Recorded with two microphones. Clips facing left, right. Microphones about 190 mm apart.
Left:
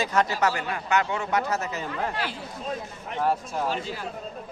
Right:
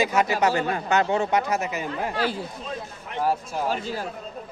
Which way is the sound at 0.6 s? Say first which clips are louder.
Right 3 dB; 35° right (ahead or behind).